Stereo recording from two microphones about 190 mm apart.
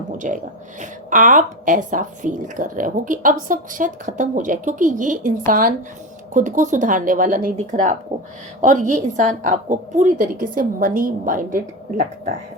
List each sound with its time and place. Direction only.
0.2 s a woman's voice: 40° right (ahead or behind)